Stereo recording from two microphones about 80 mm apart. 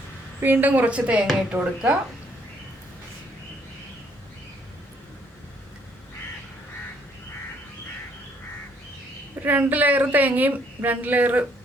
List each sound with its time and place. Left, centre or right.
0.4 s speech: right
9.4 s a woman's voice: right